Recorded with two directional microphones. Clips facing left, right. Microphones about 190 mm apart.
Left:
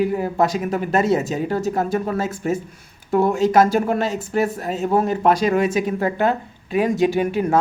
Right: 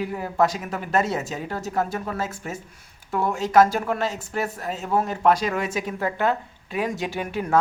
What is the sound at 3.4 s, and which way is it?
Speech, 15° left (ahead or behind).